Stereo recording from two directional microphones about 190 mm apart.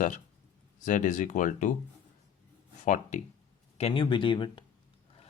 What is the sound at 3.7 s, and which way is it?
Speech, 30° left (ahead or behind).